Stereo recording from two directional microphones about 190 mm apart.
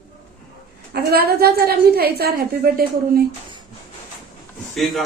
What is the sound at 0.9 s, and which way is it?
A woman's voice, 55° right (ahead or behind).